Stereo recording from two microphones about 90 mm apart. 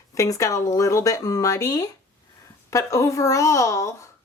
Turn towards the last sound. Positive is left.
turn(degrees=35)  # may be behind; listen again after turning